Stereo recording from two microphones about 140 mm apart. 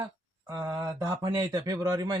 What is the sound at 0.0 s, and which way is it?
Speech, 25° right (ahead or behind).